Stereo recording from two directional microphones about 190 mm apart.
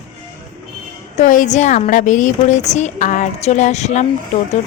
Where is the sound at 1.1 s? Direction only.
40° left (ahead or behind).